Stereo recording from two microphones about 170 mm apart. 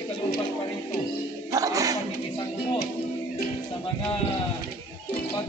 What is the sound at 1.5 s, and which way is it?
Dog, 20° right (ahead or behind).